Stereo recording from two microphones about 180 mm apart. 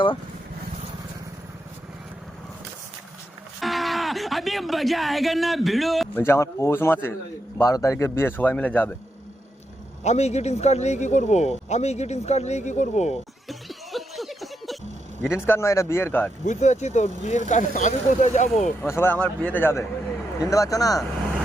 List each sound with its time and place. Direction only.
3.6 s speech: centre (ahead or behind)
6.1 s a man's voice: 15° left (ahead or behind)
10.0 s speech: 40° left (ahead or behind)
13.5 s a sound: centre (ahead or behind)
15.2 s a man's voice: 15° left (ahead or behind)
16.5 s speech: 40° left (ahead or behind)
18.8 s a man's voice: 15° left (ahead or behind)